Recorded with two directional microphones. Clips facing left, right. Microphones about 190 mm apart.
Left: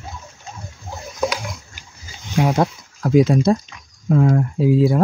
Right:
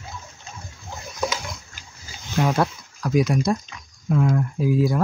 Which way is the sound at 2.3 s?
15° left (ahead or behind).